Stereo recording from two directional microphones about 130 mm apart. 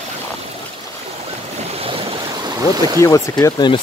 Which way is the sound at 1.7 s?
45° right (ahead or behind).